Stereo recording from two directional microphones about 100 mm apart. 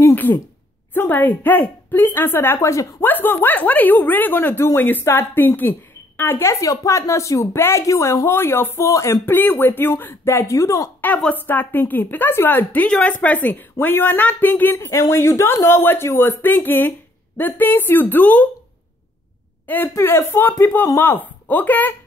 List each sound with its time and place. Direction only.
0.0 s a sound: 20° left (ahead or behind)
0.9 s a woman's voice: 20° left (ahead or behind)
3.1 s a woman's voice: 20° left (ahead or behind)
11.0 s a woman's voice: 15° left (ahead or behind)
19.6 s a woman's voice: 20° left (ahead or behind)